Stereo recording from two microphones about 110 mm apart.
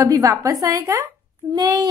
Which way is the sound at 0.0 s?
30° right (ahead or behind).